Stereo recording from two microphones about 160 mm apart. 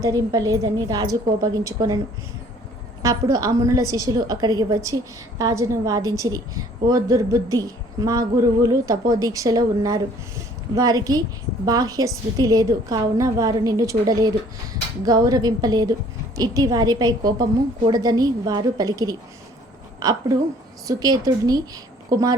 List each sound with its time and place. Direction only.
0.0 s a woman's voice: 25° right (ahead or behind)
3.0 s a woman's voice: 20° right (ahead or behind)